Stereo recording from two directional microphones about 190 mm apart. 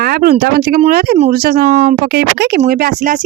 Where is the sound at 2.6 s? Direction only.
45° right (ahead or behind).